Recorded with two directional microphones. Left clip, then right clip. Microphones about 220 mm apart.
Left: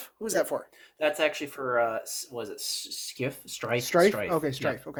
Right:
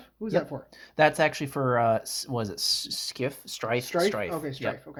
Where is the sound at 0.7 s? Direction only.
45° right (ahead or behind).